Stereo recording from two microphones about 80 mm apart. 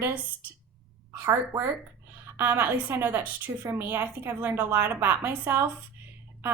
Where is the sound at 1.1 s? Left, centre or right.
Right.